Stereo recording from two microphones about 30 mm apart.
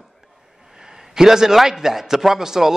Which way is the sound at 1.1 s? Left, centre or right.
Centre.